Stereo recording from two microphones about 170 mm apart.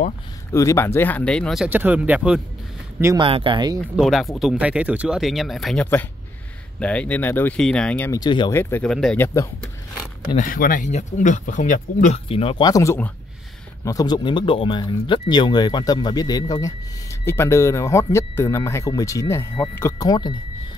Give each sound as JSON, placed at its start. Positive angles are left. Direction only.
{"t": 0.5, "sound": "speech", "side_deg": 15}
{"t": 3.2, "sound": "speech", "side_deg": -30}
{"t": 3.9, "sound": "speech", "side_deg": 0}
{"t": 8.1, "sound": "speech", "side_deg": 25}
{"t": 8.5, "sound": "speech", "side_deg": 15}
{"t": 10.3, "sound": "speech", "side_deg": 55}